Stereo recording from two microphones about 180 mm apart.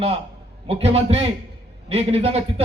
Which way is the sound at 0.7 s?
35° right (ahead or behind).